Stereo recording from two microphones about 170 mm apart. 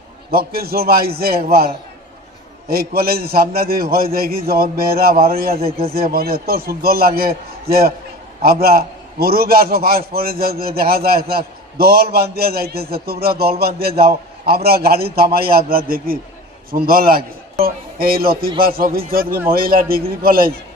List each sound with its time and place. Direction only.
0.3 s a man's voice: 65° right (ahead or behind)